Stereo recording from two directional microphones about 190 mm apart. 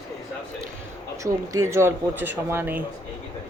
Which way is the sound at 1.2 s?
15° right (ahead or behind).